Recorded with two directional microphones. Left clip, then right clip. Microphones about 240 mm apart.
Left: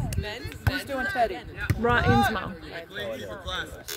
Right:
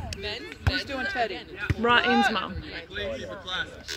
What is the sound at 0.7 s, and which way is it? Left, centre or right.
Speech, left.